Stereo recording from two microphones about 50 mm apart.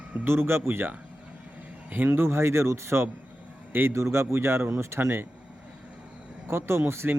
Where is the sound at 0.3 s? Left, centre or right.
Right.